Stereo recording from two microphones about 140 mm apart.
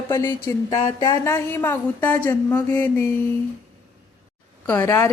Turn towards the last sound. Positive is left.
turn(degrees=20)  # may be behind; listen again after turning